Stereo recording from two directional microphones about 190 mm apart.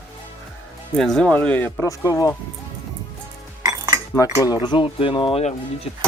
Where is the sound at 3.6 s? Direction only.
20° right (ahead or behind).